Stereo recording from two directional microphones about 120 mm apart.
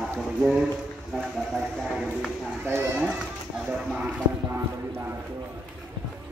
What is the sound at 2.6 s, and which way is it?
Speech, 15° right (ahead or behind).